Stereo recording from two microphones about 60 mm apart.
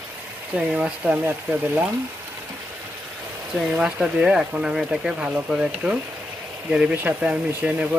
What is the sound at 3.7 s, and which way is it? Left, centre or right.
Speech, centre.